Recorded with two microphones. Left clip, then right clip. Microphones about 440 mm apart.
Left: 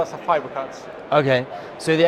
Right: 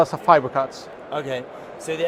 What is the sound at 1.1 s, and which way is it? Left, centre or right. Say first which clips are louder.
Speech: left 10 dB; left.